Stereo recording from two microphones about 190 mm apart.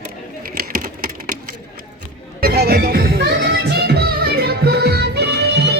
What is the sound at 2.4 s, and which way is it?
Music, 55° right (ahead or behind).